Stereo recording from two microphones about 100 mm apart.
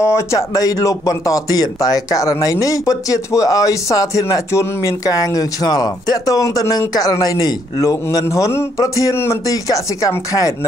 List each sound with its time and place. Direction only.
0.0 s speech: 30° left (ahead or behind)